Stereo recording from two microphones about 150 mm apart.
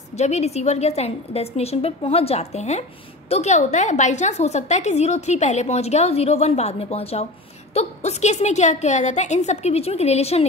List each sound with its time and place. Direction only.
0.2 s a woman's voice: 45° left (ahead or behind)